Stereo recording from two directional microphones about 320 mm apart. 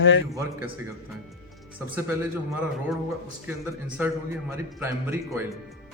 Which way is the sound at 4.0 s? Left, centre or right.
Centre.